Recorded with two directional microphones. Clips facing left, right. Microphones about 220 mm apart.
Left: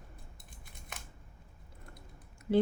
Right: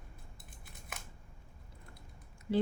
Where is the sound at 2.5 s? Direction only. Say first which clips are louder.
Left 4 dB; 50° left (ahead or behind).